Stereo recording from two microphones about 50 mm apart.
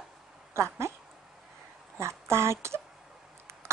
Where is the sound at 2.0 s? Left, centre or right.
Right.